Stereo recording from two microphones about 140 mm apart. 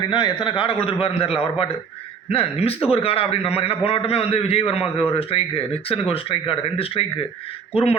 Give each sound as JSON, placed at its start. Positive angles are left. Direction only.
{"t": 0.1, "sound": "a man's voice", "side_deg": 35}